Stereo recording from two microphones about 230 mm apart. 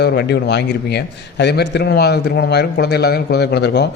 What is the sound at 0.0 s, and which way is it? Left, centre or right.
Speech, left.